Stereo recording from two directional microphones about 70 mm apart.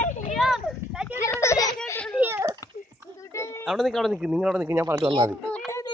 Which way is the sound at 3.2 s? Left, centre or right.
Left.